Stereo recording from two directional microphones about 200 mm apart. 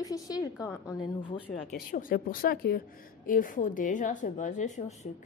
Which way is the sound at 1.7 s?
45° left (ahead or behind).